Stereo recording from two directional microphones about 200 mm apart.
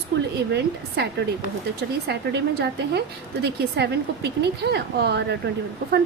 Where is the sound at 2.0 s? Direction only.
55° right (ahead or behind).